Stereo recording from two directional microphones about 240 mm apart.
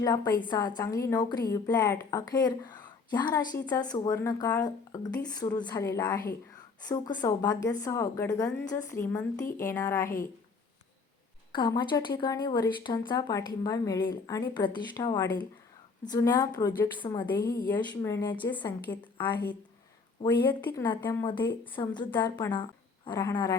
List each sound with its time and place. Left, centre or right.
0.0 s a woman's voice: centre
11.5 s a woman's voice: centre
20.2 s a woman's voice: centre